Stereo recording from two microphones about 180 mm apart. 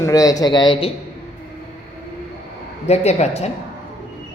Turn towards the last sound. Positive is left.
turn(degrees=35)  # may be behind; listen again after turning